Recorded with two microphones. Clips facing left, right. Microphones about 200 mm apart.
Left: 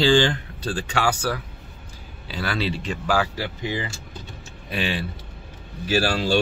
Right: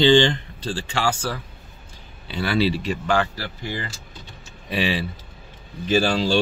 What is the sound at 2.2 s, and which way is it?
Speech, centre (ahead or behind).